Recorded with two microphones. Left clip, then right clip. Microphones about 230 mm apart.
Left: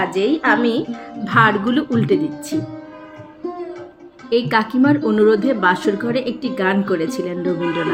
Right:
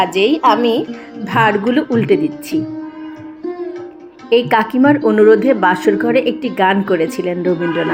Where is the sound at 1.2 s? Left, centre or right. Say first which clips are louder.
Right 1 dB; right.